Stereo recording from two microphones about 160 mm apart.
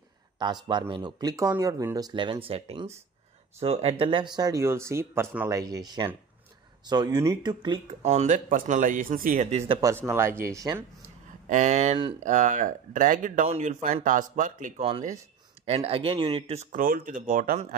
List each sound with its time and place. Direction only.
0.4 s speech: 30° right (ahead or behind)
8.0 s speech: 45° right (ahead or behind)
9.7 s speech: 20° right (ahead or behind)
11.4 s speech: 50° right (ahead or behind)
14.8 s speech: 35° right (ahead or behind)
16.7 s speech: 60° right (ahead or behind)